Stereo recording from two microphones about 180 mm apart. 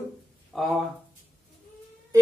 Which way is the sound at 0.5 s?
Centre (ahead or behind).